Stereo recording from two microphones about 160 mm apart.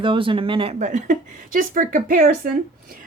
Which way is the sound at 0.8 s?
50° right (ahead or behind).